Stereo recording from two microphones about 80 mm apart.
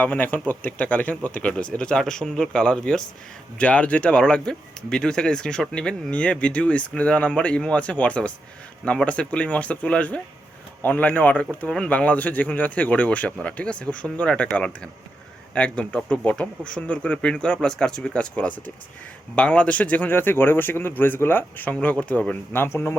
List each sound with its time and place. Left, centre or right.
0.0 s speech: left
22.5 s a man's voice: left